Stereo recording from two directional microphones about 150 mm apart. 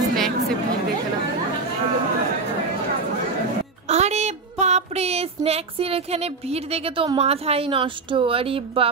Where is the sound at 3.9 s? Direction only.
45° right (ahead or behind).